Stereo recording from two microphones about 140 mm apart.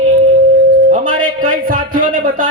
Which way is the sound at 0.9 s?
75° right (ahead or behind).